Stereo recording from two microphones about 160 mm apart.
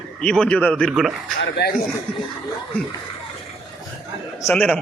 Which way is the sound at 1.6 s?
90° left.